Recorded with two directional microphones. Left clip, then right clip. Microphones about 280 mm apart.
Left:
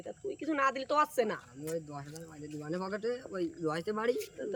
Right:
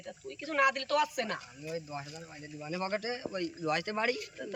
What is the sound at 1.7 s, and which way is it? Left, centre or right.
A man's voice, centre.